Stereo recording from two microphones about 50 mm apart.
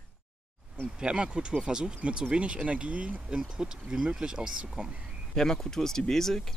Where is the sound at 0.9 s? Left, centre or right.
Centre.